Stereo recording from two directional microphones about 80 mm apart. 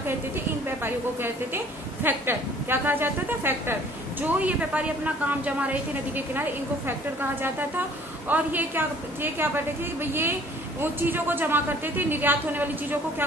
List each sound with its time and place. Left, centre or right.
0.8 s a woman's voice: right
10.8 s a woman's voice: right